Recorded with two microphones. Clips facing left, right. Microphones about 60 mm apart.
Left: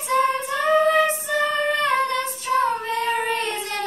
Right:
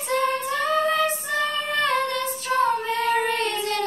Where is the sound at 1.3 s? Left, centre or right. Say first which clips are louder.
Left 3 dB; left.